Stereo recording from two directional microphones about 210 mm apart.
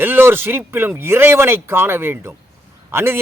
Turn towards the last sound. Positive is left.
turn(degrees=-10)  # may be behind; listen again after turning